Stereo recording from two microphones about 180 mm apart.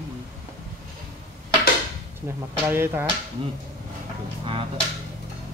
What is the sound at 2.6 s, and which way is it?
Speech, 15° right (ahead or behind).